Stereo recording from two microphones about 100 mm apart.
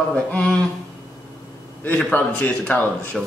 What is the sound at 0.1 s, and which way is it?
Speech, 10° left (ahead or behind).